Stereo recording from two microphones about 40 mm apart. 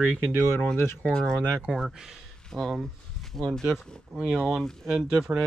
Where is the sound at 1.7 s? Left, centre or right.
Centre.